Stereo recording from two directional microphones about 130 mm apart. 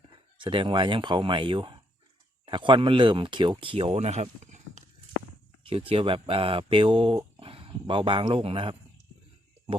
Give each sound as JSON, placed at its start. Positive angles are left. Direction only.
{"t": 0.4, "sound": "speech", "side_deg": -40}
{"t": 5.6, "sound": "speech", "side_deg": -45}